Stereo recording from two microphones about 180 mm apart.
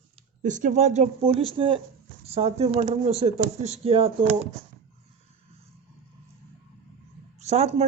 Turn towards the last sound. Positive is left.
turn(degrees=-35)  # may be behind; listen again after turning